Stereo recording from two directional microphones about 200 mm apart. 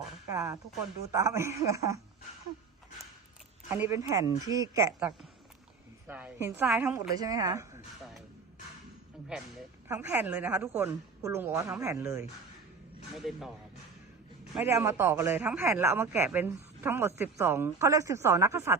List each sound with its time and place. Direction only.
0.3 s speech: 15° right (ahead or behind)
3.7 s speech: 15° right (ahead or behind)
6.1 s speech: 10° right (ahead or behind)
7.2 s speech: 15° right (ahead or behind)
9.3 s speech: 5° right (ahead or behind)
13.1 s speech: centre (ahead or behind)
14.5 s speech: 10° right (ahead or behind)